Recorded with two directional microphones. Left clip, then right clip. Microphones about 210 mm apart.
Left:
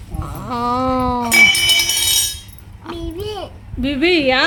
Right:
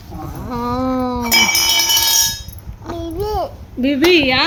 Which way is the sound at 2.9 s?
35° left (ahead or behind).